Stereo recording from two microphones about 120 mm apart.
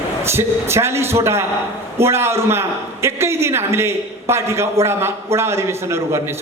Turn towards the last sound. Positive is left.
turn(degrees=-20)  # may be behind; listen again after turning